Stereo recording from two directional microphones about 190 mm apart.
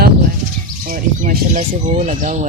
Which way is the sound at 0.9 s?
50° right (ahead or behind).